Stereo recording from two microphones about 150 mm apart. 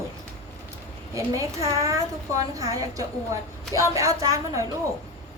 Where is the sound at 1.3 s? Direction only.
20° right (ahead or behind).